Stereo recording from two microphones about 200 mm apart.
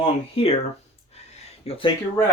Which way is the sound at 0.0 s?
30° left (ahead or behind).